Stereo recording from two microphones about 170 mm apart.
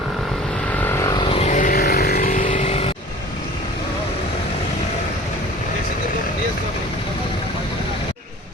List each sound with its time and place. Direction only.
1.1 s vehicle: 30° left (ahead or behind)